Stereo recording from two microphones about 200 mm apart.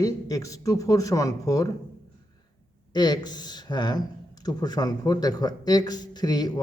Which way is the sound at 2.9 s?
20° left (ahead or behind).